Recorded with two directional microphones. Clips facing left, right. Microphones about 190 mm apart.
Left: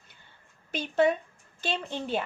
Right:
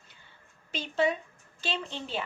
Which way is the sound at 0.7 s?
55° left (ahead or behind).